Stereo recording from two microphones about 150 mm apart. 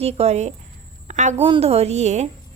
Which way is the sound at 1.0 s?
55° right (ahead or behind).